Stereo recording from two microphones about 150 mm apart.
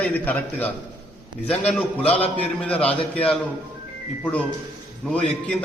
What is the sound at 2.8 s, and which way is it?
Speech, 40° left (ahead or behind).